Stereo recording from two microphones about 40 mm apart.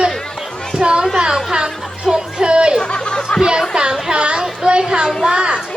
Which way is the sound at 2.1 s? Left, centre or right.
Centre.